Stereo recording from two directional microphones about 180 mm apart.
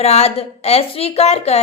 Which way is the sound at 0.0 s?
35° left (ahead or behind).